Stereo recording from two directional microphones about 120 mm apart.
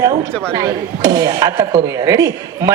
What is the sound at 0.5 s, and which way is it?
Speech, 30° right (ahead or behind).